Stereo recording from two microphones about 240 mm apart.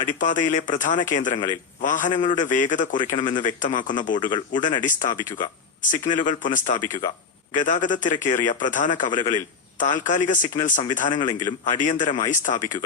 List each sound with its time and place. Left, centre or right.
0.0 s a man's voice: left
11.2 s a man's voice: centre
11.8 s a man's voice: left